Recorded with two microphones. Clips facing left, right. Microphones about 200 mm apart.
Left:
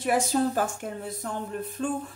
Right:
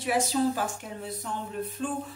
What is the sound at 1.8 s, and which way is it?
Speech, 45° left (ahead or behind).